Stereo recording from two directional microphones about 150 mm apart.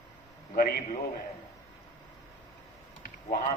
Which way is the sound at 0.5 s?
75° left (ahead or behind).